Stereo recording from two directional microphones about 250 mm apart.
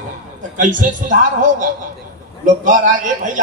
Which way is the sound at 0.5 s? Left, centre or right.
Right.